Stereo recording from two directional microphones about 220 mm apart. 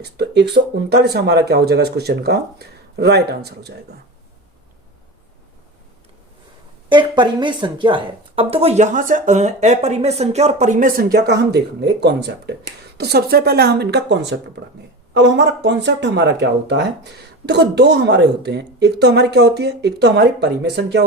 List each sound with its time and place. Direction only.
0.0 s speech: 50° right (ahead or behind)
6.8 s speech: 20° right (ahead or behind); by 21.0 s 50° right (ahead or behind)